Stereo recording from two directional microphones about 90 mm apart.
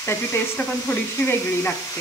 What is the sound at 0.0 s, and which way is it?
Speech, 30° left (ahead or behind).